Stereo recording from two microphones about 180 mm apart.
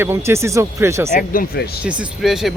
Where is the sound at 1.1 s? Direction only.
50° left (ahead or behind).